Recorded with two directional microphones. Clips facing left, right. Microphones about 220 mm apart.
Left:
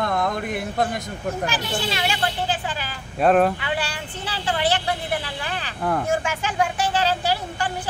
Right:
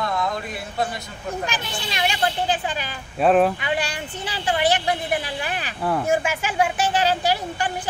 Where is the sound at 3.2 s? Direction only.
Centre (ahead or behind).